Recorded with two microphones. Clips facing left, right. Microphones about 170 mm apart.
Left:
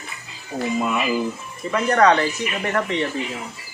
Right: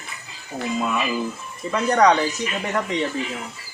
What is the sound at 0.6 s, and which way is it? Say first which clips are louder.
Speech: left 2 dB; 5° left (ahead or behind).